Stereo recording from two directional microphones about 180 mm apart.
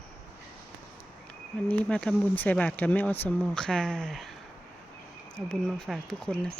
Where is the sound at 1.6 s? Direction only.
10° left (ahead or behind).